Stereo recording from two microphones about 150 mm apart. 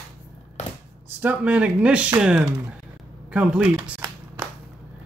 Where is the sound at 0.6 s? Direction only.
50° left (ahead or behind).